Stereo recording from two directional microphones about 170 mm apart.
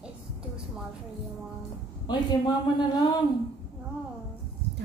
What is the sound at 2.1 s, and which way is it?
A woman's voice, 25° left (ahead or behind).